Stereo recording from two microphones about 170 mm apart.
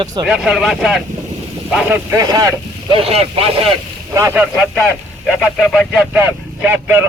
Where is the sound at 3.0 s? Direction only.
35° right (ahead or behind).